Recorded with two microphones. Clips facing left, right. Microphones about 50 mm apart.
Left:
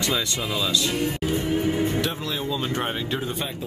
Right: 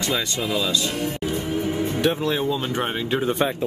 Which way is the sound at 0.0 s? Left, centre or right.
Centre.